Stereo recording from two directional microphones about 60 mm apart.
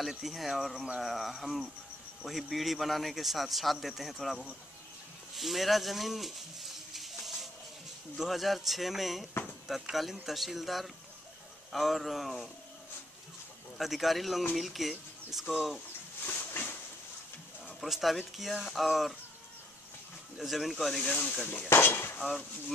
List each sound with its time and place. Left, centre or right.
0.0 s a man's voice: centre
5.3 s a sound: centre
8.2 s a man's voice: centre
13.7 s a man's voice: centre
16.3 s a sound: left
17.7 s a man's voice: centre
20.3 s a man's voice: centre
21.0 s speech: centre
21.6 s speech: left